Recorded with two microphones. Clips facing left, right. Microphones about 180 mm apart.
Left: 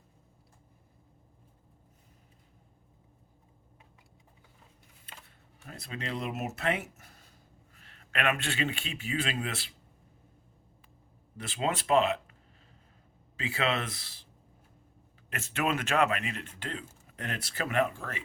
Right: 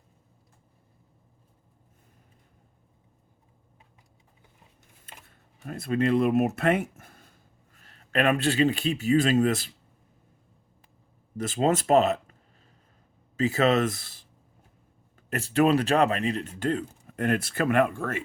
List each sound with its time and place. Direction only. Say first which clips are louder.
5.6 s speech: right 14 dB; 50° right (ahead or behind)
7.8 s a man's voice: right 8 dB; 40° right (ahead or behind)
11.3 s speech: right 8 dB; 40° right (ahead or behind)
15.3 s speech: right 9 dB; 35° right (ahead or behind); by 18.2 s 55° right (ahead or behind)